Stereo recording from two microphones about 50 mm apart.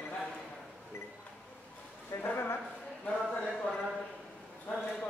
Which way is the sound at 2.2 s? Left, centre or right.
Left.